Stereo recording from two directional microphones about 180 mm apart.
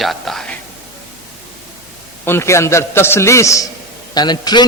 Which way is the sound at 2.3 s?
15° left (ahead or behind).